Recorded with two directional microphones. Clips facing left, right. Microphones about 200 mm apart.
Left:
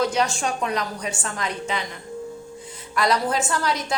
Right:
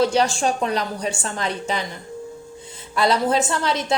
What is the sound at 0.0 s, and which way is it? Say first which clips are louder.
A woman's voice: right 4 dB; 30° right (ahead or behind).